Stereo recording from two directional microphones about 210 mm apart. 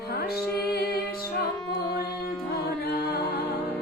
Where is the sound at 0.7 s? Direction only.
45° left (ahead or behind).